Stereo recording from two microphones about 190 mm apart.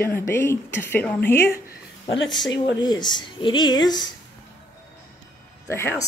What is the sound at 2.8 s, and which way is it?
Speech, 20° left (ahead or behind).